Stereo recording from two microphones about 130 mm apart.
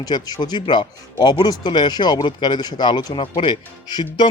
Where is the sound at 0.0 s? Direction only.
30° left (ahead or behind).